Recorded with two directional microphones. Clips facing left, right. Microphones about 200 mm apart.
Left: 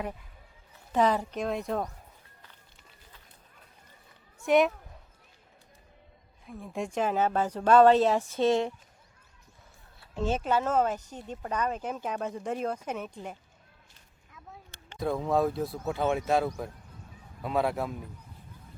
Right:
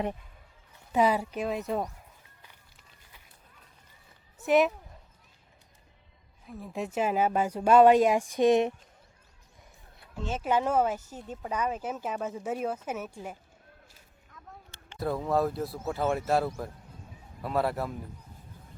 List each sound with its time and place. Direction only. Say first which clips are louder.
0.9 s speech: even; 10° right (ahead or behind)
4.4 s a man's voice: even; centre (ahead or behind)
6.4 s speech: even; centre (ahead or behind); by 8.7 s 20° right (ahead or behind)
10.4 s speech: right 3 dB; 15° right (ahead or behind)
14.3 s a man's voice: left 1 dB; centre (ahead or behind)